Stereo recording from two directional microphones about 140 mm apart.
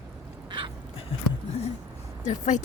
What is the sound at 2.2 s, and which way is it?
Speech, 60° left (ahead or behind).